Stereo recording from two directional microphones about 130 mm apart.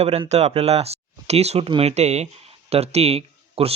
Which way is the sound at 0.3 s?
55° right (ahead or behind).